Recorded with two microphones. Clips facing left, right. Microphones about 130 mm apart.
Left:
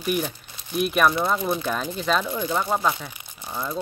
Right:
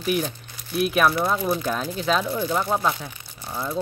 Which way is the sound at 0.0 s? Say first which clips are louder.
Right 1 dB; centre (ahead or behind).